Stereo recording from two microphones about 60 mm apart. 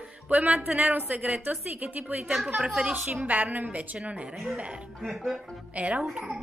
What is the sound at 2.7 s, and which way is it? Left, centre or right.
A woman's voice, centre.